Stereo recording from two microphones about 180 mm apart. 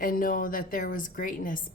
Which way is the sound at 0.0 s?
50° left (ahead or behind).